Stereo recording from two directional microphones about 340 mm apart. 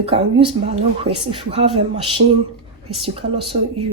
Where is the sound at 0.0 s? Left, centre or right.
Centre.